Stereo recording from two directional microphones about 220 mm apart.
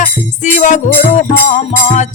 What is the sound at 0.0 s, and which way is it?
Music, 35° left (ahead or behind).